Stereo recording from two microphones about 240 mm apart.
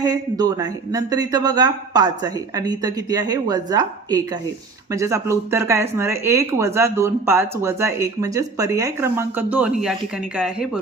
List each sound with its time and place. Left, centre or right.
0.0 s speech: centre